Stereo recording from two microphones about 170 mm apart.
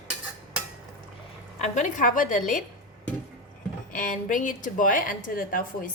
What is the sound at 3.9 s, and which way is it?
Speech, 50° left (ahead or behind).